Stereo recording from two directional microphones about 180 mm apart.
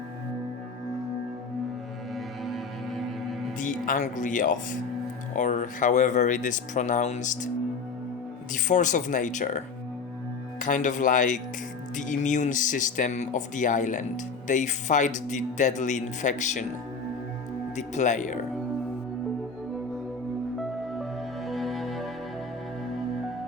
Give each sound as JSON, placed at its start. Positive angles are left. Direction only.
{"t": 2.1, "sound": "music", "side_deg": 0}
{"t": 3.6, "sound": "speech", "side_deg": 45}
{"t": 8.6, "sound": "speech", "side_deg": 45}
{"t": 10.6, "sound": "speech", "side_deg": 45}
{"t": 17.7, "sound": "speech", "side_deg": 40}
{"t": 20.6, "sound": "music", "side_deg": 0}